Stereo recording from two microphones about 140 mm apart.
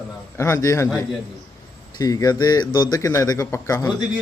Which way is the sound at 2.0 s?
25° left (ahead or behind).